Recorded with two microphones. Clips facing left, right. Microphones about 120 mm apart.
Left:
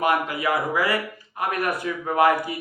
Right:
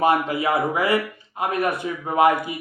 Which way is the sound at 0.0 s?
25° right (ahead or behind).